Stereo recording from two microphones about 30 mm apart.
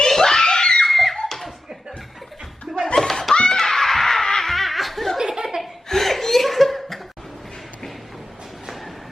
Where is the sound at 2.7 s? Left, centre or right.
Right.